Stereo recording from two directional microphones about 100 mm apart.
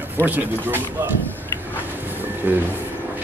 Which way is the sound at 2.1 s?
20° right (ahead or behind).